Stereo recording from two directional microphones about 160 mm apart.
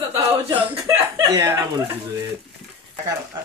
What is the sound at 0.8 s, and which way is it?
Chuckle, 25° right (ahead or behind).